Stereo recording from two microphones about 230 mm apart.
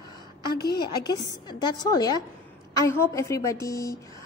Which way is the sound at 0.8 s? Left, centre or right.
Centre.